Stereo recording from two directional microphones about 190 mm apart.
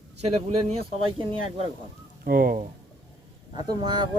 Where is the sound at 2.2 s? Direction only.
50° right (ahead or behind).